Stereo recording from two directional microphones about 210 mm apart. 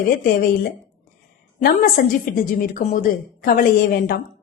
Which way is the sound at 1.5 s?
40° left (ahead or behind).